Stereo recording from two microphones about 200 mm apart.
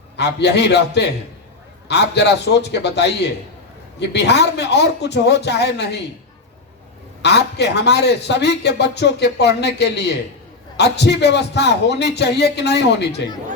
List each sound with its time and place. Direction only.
0.2 s a man's voice: 60° left (ahead or behind)
4.1 s a man's voice: 60° left (ahead or behind)
7.2 s a man's voice: 60° left (ahead or behind)